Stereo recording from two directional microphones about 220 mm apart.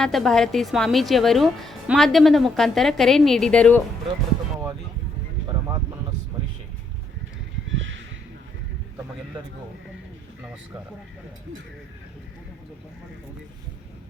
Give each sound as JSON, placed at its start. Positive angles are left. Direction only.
{"t": 0.0, "sound": "a woman's voice", "side_deg": 0}
{"t": 6.3, "sound": "vehicle", "side_deg": -15}
{"t": 7.7, "sound": "a sound", "side_deg": -60}